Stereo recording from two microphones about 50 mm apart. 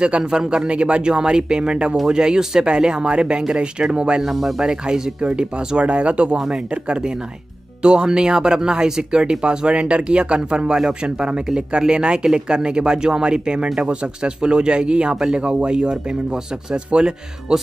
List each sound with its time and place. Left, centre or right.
0.0 s speech: centre
4.2 s speech: centre; by 6.3 s right
6.3 s speech: centre
6.7 s speech: centre